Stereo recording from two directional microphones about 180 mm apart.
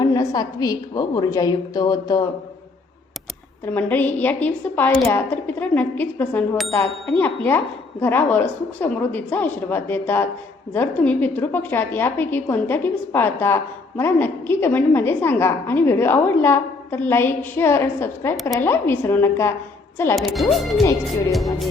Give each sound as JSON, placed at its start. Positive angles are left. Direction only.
{"t": 0.0, "sound": "a woman's voice", "side_deg": 20}
{"t": 3.8, "sound": "a woman's voice", "side_deg": 10}
{"t": 20.1, "sound": "speech", "side_deg": 0}